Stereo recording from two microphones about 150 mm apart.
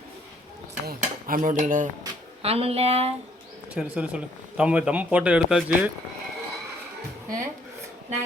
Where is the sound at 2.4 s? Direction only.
40° right (ahead or behind).